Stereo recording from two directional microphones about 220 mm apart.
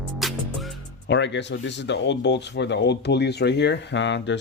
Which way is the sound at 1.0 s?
55° left (ahead or behind).